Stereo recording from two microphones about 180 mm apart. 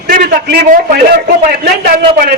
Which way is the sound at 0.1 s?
55° right (ahead or behind).